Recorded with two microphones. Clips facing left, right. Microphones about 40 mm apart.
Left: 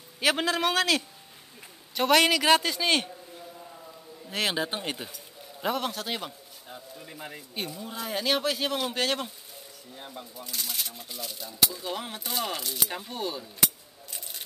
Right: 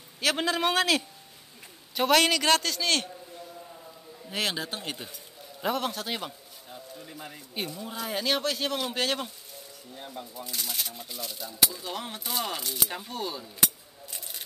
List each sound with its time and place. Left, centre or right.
0.2 s a man's voice: centre
4.3 s speech: centre
4.6 s speech: centre
5.1 s speech: centre
6.7 s a man's voice: centre
7.5 s speech: centre
14.1 s a sound: centre